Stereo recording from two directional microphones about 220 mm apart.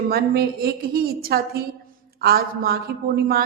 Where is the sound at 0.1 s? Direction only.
45° right (ahead or behind).